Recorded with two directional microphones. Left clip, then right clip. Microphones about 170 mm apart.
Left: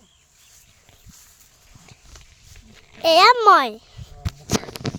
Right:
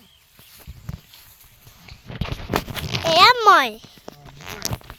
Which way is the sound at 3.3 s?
15° left (ahead or behind).